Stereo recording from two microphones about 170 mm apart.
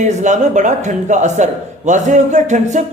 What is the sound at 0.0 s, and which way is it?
Speech, 45° right (ahead or behind).